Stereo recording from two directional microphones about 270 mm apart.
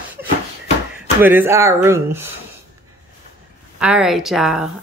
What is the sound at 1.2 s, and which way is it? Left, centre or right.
Speech, centre.